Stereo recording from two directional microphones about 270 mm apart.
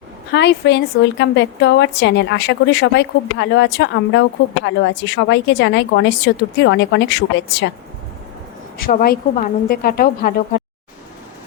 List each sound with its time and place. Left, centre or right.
0.3 s speech: left
8.9 s speech: left